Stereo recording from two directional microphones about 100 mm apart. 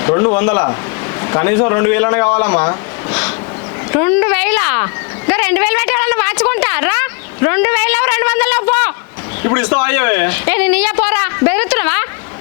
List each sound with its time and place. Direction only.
0.0 s speech: 25° left (ahead or behind)